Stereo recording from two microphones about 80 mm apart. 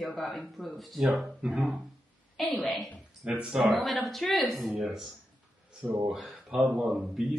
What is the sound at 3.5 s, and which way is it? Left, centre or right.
Speech, centre.